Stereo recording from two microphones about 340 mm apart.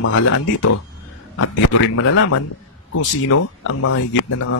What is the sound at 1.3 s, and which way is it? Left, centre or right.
Speech, left.